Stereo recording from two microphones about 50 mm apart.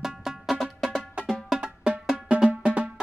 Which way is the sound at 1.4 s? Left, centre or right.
Centre.